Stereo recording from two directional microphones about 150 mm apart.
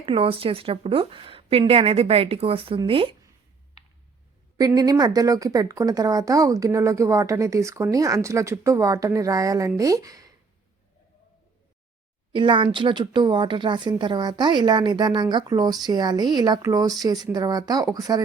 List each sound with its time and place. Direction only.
0.0 s speech: 35° right (ahead or behind)
4.5 s speech: 25° right (ahead or behind)
12.3 s speech: 35° right (ahead or behind)